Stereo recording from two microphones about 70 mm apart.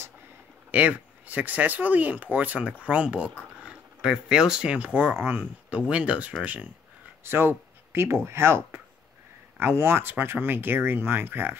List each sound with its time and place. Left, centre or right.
0.7 s speech: right
5.1 s speech: right
5.7 s speech: centre
7.2 s speech: right